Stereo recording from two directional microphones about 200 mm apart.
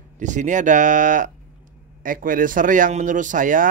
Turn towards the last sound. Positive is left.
turn(degrees=-40)  # may be behind; listen again after turning